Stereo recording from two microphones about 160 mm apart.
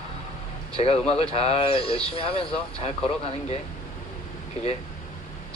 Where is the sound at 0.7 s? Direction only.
35° left (ahead or behind).